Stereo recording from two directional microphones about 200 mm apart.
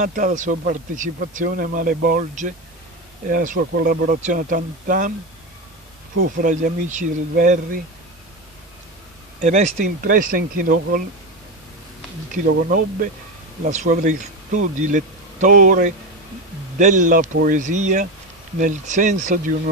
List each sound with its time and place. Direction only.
0.0 s speech: 40° right (ahead or behind)
6.2 s speech: 40° right (ahead or behind)
9.4 s speech: 35° right (ahead or behind)
12.4 s speech: 45° right (ahead or behind)